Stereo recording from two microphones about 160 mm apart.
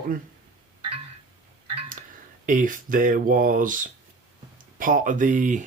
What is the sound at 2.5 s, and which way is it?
Speech, 55° right (ahead or behind).